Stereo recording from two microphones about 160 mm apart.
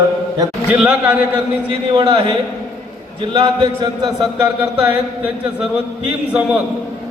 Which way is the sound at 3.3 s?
30° right (ahead or behind).